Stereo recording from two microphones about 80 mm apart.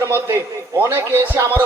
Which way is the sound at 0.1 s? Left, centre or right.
Right.